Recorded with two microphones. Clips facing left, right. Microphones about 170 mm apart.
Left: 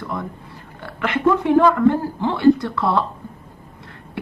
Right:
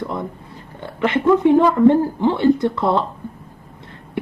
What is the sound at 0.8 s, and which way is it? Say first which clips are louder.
Speech: right 2 dB; 20° right (ahead or behind).